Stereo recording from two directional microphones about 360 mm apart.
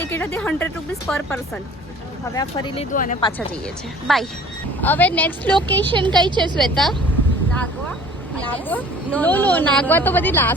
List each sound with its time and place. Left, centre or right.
0.0 s speech: centre
5.9 s a woman's voice: centre
6.6 s speech: centre